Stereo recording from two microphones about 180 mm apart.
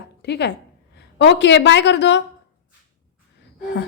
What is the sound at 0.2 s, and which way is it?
A woman's voice, 65° left (ahead or behind).